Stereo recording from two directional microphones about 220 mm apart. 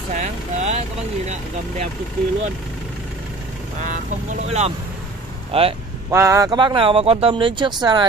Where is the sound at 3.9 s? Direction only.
35° right (ahead or behind).